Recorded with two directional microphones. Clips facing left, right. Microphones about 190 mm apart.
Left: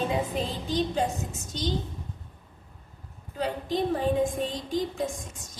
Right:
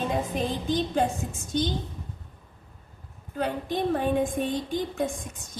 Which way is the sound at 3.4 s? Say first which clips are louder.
Right 1 dB; 55° right (ahead or behind).